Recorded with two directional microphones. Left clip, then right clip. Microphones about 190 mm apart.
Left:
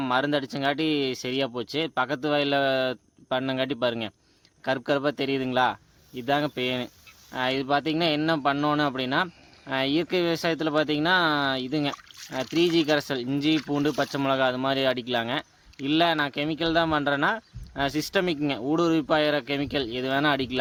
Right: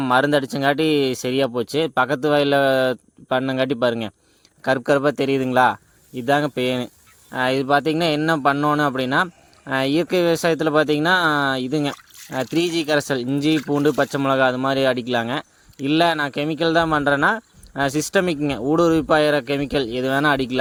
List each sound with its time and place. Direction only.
0.0 s speech: 40° right (ahead or behind)